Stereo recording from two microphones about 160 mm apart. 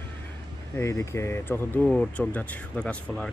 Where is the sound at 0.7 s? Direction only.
15° left (ahead or behind).